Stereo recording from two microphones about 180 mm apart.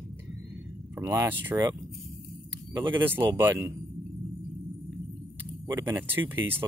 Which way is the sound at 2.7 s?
15° right (ahead or behind).